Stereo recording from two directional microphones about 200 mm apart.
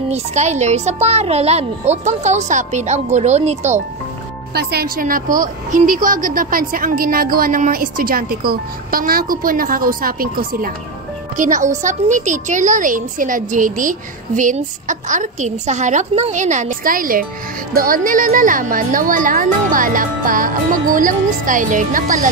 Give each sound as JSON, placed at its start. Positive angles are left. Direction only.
{"t": 0.1, "sound": "a woman's voice", "side_deg": -35}
{"t": 4.6, "sound": "a woman's voice", "side_deg": -50}